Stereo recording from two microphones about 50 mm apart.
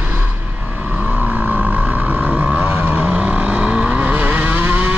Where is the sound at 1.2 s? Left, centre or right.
Right.